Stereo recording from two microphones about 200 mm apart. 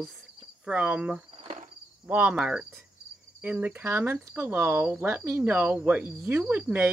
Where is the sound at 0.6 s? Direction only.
5° right (ahead or behind).